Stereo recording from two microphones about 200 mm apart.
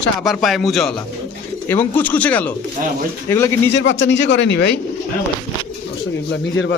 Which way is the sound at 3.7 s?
65° left (ahead or behind).